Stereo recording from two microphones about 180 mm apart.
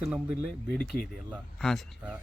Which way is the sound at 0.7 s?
5° left (ahead or behind).